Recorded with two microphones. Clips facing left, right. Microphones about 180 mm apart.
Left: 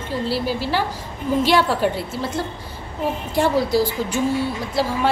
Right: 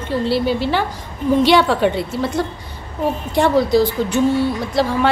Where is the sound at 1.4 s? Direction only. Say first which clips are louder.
Right 4 dB; 75° right (ahead or behind).